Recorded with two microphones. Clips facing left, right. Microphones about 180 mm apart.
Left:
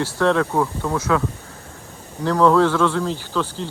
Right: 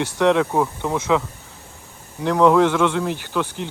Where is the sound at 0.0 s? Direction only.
15° right (ahead or behind).